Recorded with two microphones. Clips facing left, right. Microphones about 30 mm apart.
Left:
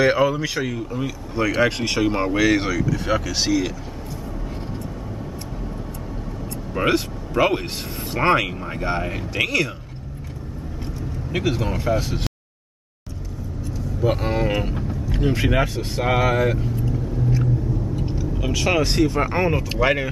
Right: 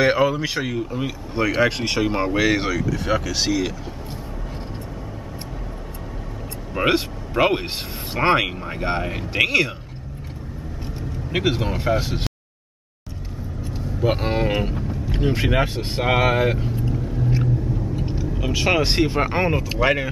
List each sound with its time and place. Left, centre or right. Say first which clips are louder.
0.0 s speech: even; centre
6.7 s speech: right 1 dB; centre
9.3 s speech: right 3 dB; right
11.3 s speech: right 1 dB; right
14.0 s speech: even; right
14.6 s speech: right 1 dB; centre
14.9 s vehicle: even; centre
15.2 s speech: even; centre
15.6 s speech: even; right
18.5 s speech: right 1 dB; centre
18.9 s speech: even; right
19.2 s speech: even; centre
19.5 s speech: even; centre